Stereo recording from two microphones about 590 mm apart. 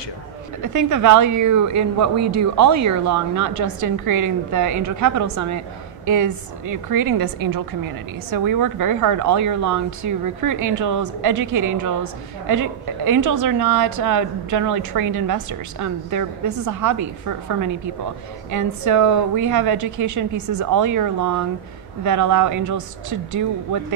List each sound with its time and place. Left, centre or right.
0.7 s a woman's voice: right